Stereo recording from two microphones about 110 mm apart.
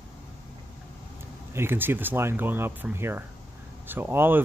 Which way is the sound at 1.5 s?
20° right (ahead or behind).